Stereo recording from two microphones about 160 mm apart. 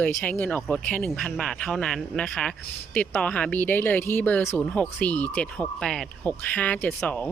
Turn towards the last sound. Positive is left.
turn(degrees=10)  # may be behind; listen again after turning